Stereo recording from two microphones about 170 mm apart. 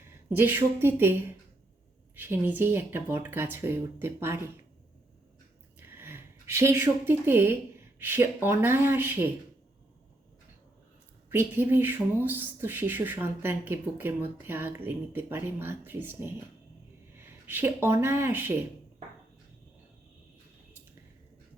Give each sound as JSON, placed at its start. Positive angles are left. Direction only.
{"t": 0.0, "sound": "a woman's voice", "side_deg": -10}
{"t": 2.1, "sound": "speech", "side_deg": -10}
{"t": 5.8, "sound": "a sound", "side_deg": -15}
{"t": 7.9, "sound": "speech", "side_deg": -15}
{"t": 11.3, "sound": "speech", "side_deg": -15}